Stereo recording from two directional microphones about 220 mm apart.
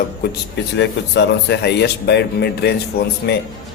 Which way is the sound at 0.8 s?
50° left (ahead or behind).